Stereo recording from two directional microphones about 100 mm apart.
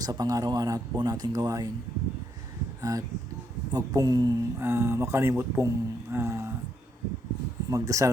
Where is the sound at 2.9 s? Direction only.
40° right (ahead or behind).